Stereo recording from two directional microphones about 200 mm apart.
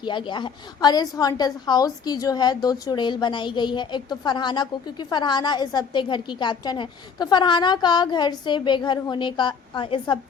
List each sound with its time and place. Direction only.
0.0 s a woman's voice: 25° left (ahead or behind)